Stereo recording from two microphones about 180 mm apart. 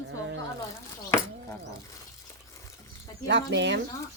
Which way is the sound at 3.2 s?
75° right (ahead or behind).